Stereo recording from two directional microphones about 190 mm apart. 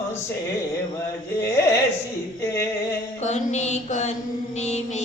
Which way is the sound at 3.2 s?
40° left (ahead or behind).